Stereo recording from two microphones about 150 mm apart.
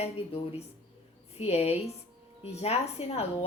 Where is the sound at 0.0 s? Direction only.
45° left (ahead or behind).